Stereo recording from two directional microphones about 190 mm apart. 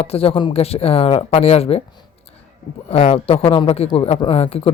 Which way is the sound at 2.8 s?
30° left (ahead or behind).